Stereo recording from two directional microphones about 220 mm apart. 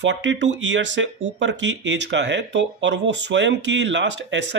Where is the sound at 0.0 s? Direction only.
55° right (ahead or behind).